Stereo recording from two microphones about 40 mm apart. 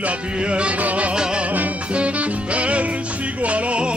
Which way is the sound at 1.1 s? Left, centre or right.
Centre.